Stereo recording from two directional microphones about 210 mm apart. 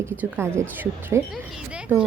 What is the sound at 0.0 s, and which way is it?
Speech, 10° right (ahead or behind).